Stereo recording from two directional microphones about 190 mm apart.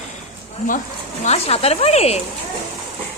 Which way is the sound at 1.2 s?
35° left (ahead or behind).